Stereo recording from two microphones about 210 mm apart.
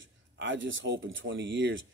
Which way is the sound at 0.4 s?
60° right (ahead or behind).